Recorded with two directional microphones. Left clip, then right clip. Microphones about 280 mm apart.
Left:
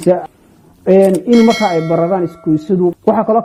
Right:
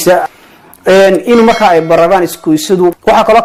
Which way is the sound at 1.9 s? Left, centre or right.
Right.